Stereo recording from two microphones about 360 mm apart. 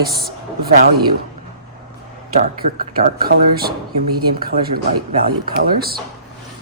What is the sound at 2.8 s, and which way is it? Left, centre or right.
Speech, right.